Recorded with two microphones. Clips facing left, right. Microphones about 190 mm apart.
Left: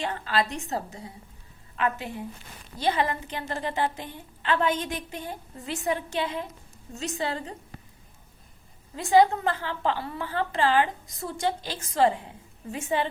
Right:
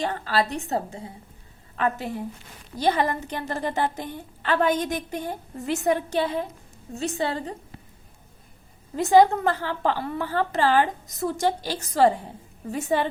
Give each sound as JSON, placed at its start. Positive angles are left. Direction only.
{"t": 0.0, "sound": "a woman's voice", "side_deg": -35}
{"t": 9.0, "sound": "a woman's voice", "side_deg": -45}